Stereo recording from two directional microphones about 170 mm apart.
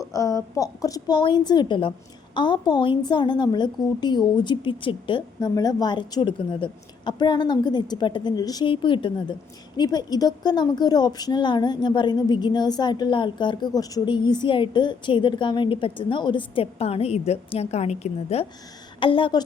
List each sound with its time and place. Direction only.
0.0 s a woman's voice: 20° left (ahead or behind)